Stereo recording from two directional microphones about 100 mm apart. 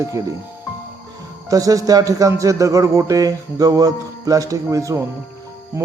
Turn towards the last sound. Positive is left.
turn(degrees=-25)  # may be behind; listen again after turning